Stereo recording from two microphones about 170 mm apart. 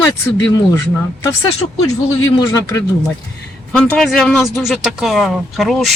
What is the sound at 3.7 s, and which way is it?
Speech, 5° left (ahead or behind).